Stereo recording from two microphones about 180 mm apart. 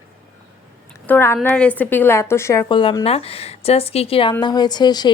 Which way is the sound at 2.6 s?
25° left (ahead or behind).